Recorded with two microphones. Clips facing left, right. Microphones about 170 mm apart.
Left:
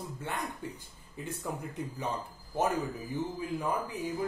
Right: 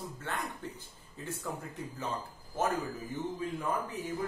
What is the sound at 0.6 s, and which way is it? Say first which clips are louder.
Speech: left 2 dB; 10° left (ahead or behind).